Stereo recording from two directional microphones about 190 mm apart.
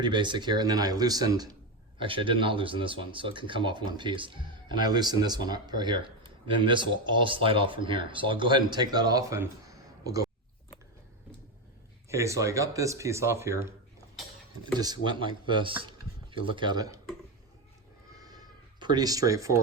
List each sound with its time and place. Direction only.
0.0 s speech: 25° right (ahead or behind)
12.0 s speech: 15° right (ahead or behind)
14.8 s speech: 25° right (ahead or behind)
18.1 s a sound: 20° right (ahead or behind)